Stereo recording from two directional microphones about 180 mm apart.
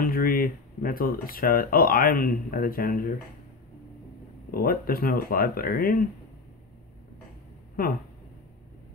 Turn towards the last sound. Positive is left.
turn(degrees=55)  # may be behind; listen again after turning